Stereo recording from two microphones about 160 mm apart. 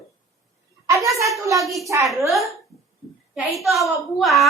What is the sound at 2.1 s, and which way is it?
Speech, centre (ahead or behind).